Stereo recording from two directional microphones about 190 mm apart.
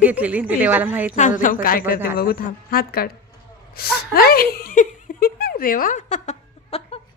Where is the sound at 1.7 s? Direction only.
50° left (ahead or behind).